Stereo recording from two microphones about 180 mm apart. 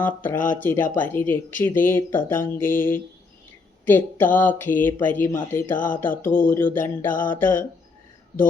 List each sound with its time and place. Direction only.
0.0 s speech: 10° left (ahead or behind)
5.7 s music: 45° left (ahead or behind)
6.0 s speech: 10° left (ahead or behind)
7.1 s music: 50° left (ahead or behind)
7.3 s speech: 10° left (ahead or behind)